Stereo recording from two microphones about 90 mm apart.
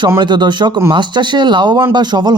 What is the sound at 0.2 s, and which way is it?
Speech, 55° right (ahead or behind).